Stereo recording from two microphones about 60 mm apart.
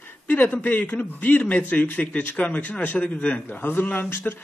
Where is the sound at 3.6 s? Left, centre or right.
Left.